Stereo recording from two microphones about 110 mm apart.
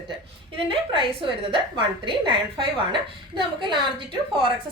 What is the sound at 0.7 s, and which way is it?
A woman's voice, 55° right (ahead or behind).